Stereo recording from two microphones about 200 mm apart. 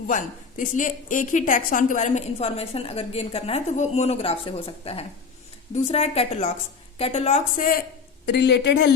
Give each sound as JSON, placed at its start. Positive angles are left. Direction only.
{"t": 0.1, "sound": "a woman's voice", "side_deg": 40}
{"t": 8.3, "sound": "speech", "side_deg": 60}